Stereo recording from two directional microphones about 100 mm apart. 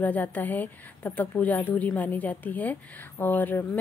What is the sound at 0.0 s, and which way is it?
A woman's voice, 15° left (ahead or behind).